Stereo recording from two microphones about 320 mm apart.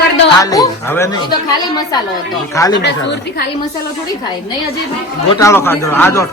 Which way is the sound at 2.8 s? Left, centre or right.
Left.